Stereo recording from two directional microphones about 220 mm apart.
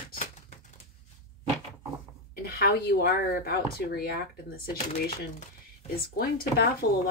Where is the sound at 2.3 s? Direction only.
45° left (ahead or behind).